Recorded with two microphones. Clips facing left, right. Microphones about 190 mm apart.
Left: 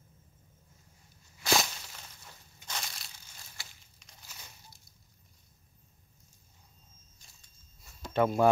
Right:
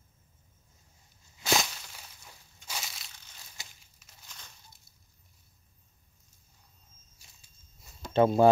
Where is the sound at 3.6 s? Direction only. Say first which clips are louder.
Right 1 dB; 20° right (ahead or behind).